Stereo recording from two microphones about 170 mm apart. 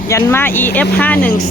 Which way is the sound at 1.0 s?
10° left (ahead or behind).